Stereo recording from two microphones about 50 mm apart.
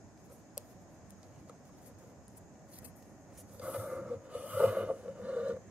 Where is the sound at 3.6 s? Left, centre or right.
Centre.